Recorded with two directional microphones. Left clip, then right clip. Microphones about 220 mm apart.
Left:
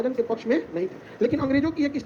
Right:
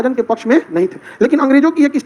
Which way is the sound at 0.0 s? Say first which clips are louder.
Right 10 dB; 45° right (ahead or behind).